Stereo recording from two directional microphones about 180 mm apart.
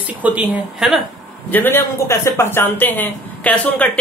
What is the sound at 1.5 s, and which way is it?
Speech, 10° left (ahead or behind).